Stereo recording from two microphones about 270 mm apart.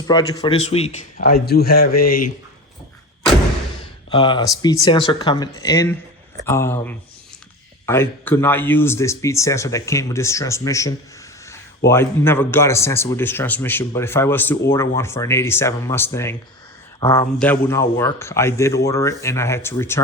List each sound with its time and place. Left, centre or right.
0.1 s speech: centre; by 1.9 s left
1.9 s speech: left
4.1 s speech: centre
17.3 s speech: centre